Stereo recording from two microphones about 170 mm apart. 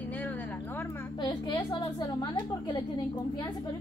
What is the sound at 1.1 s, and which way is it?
A woman's voice, 25° left (ahead or behind).